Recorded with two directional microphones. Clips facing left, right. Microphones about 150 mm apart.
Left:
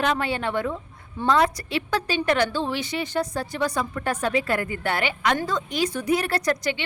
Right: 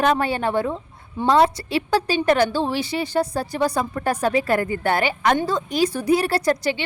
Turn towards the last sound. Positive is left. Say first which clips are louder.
# right 4 dB
turn(degrees=-30)  # may be behind; listen again after turning